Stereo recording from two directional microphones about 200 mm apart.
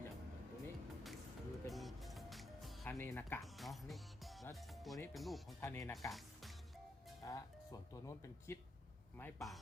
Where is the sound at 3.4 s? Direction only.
Centre (ahead or behind).